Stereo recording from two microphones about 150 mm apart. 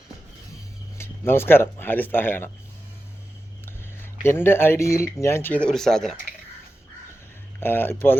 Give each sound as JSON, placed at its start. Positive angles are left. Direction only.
{"t": 0.9, "sound": "speech", "side_deg": 15}
{"t": 3.7, "sound": "speech", "side_deg": 15}
{"t": 7.6, "sound": "speech", "side_deg": 15}